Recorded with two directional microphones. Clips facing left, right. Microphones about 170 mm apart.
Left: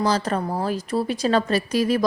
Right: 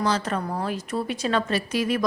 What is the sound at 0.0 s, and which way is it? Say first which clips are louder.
A woman's voice: left 3 dB; 35° left (ahead or behind).